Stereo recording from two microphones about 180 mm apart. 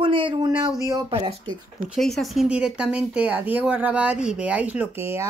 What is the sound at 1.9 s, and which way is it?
Speech, centre (ahead or behind).